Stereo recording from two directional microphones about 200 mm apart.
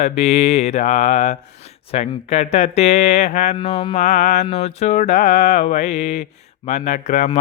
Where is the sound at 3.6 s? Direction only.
20° left (ahead or behind).